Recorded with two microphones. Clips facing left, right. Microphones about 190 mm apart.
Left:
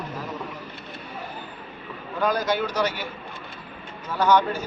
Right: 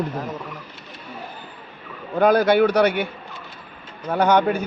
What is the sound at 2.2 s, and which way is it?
Speech, 60° right (ahead or behind).